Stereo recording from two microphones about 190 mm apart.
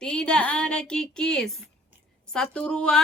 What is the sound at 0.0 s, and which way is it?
Speech, 5° left (ahead or behind).